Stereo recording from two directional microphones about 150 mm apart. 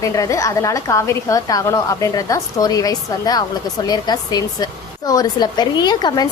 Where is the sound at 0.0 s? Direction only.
20° left (ahead or behind).